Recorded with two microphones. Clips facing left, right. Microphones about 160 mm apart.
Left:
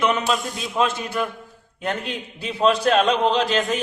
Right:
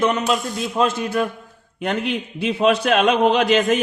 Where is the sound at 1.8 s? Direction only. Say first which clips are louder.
Right 4 dB; 70° right (ahead or behind).